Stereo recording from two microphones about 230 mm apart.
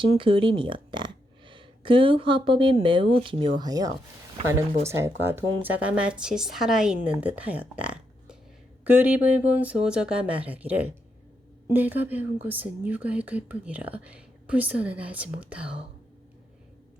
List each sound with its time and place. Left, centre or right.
0.2 s speech: right; by 15.7 s centre